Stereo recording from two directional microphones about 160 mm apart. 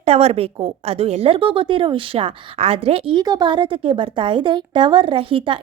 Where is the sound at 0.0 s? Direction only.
40° right (ahead or behind).